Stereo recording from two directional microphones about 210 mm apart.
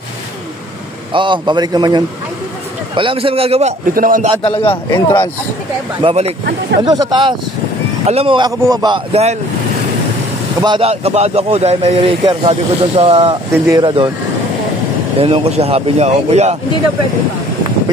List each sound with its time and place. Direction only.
1.1 s speech: 25° right (ahead or behind)
3.9 s speech: 40° right (ahead or behind)
4.4 s a man's voice: 25° left (ahead or behind)
5.9 s speech: 25° right (ahead or behind)
10.6 s speech: 25° right (ahead or behind)
15.1 s speech: 25° right (ahead or behind)